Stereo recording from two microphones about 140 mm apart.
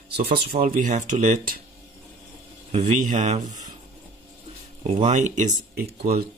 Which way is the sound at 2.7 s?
60° right (ahead or behind).